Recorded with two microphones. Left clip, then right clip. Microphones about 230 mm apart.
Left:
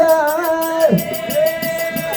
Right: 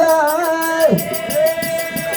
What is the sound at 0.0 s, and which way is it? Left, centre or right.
Music, right.